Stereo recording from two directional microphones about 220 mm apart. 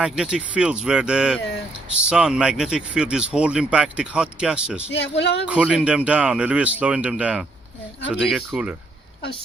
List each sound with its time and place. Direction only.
0.0 s speech: 5° right (ahead or behind)
4.9 s speech: 50° left (ahead or behind)
5.5 s speech: 5° right (ahead or behind)